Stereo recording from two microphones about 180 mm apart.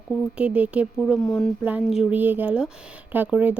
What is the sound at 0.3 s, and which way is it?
Speech, 10° right (ahead or behind).